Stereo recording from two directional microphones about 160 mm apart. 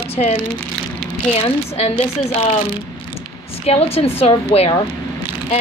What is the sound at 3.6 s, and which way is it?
Speech, 40° left (ahead or behind).